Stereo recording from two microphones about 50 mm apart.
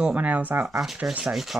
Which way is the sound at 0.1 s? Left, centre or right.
Right.